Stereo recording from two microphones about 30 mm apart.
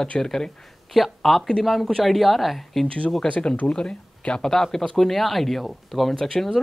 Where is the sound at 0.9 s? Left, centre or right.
Centre.